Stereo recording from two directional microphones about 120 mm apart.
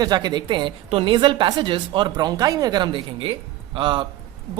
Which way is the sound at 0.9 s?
50° right (ahead or behind).